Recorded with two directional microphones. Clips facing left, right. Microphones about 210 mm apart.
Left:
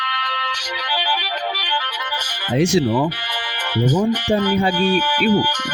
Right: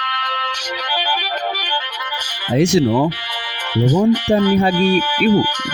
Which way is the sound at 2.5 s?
40° right (ahead or behind).